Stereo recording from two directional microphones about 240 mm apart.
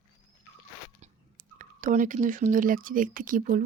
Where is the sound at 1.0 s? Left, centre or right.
Right.